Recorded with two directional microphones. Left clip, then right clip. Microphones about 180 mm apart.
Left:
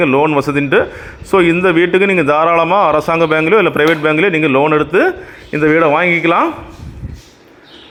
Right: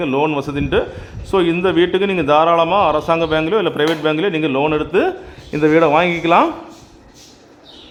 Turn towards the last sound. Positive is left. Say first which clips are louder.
# left 2 dB
turn(degrees=5)  # may be behind; listen again after turning